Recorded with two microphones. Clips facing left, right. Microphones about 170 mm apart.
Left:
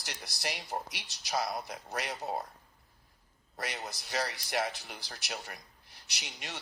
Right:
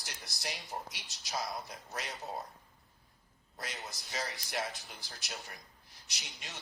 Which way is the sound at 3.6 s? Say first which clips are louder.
Left 5 dB; 70° left (ahead or behind).